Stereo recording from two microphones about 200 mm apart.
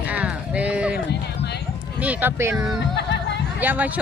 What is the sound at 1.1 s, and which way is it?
Run, 55° left (ahead or behind).